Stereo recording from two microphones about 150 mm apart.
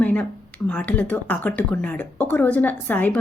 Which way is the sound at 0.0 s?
10° left (ahead or behind).